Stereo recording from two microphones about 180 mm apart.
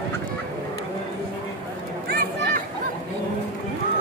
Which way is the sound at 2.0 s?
55° right (ahead or behind).